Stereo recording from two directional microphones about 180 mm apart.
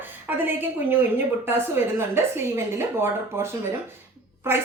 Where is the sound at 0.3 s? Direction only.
10° right (ahead or behind).